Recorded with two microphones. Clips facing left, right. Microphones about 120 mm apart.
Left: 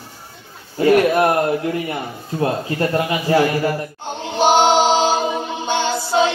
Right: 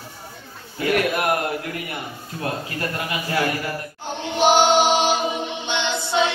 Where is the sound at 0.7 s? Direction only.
30° left (ahead or behind).